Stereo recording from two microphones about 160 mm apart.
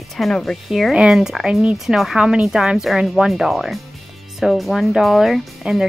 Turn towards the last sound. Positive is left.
turn(degrees=-5)  # may be behind; listen again after turning